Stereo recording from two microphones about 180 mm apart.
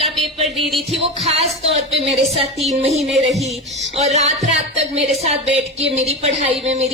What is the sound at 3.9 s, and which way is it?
Speech, 40° right (ahead or behind).